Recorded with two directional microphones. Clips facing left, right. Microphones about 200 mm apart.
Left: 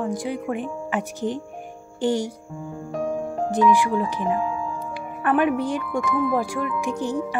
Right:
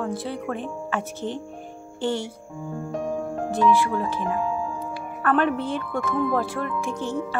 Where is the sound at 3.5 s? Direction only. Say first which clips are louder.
Left 1 dB; 15° left (ahead or behind).